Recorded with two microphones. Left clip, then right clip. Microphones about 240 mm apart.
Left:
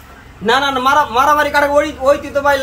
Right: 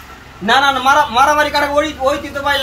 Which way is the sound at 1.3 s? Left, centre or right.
Left.